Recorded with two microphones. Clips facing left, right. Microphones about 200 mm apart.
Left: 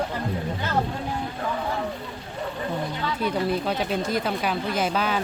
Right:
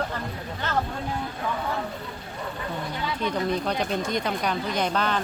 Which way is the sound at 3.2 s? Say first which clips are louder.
Left 1 dB; 5° left (ahead or behind).